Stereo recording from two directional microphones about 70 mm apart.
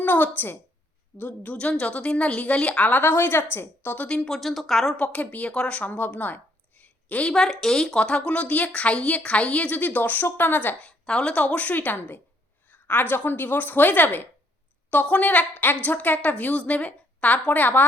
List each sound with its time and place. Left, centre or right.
0.0 s a woman's voice: left
3.0 s a woman's voice: left
4.0 s a woman's voice: centre
4.4 s speech: centre
4.9 s speech: centre
7.3 s a woman's voice: centre; by 10.8 s left
10.8 s a woman's voice: centre